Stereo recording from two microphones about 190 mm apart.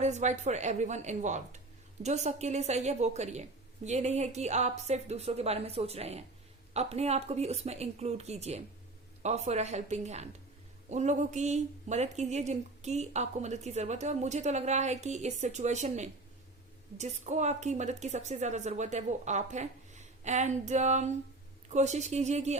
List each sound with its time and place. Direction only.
0.0 s speech: 40° right (ahead or behind)